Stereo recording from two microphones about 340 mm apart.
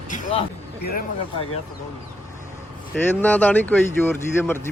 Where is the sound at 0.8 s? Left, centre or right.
Left.